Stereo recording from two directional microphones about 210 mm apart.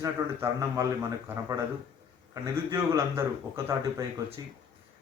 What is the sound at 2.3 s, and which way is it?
Speech, 15° right (ahead or behind).